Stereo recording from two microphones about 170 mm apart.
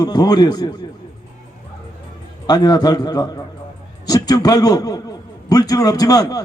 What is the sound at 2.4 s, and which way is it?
A man's voice, 25° left (ahead or behind).